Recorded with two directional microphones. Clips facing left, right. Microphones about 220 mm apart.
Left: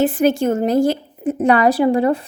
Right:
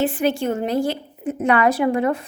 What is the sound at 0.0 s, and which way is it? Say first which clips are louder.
A woman's voice: left 5 dB; 45° left (ahead or behind).